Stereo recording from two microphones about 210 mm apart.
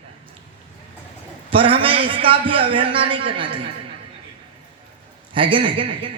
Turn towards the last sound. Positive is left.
turn(degrees=-25)  # may be behind; listen again after turning